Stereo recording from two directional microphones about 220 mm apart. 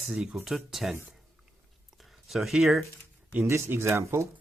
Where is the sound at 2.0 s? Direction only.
Centre (ahead or behind).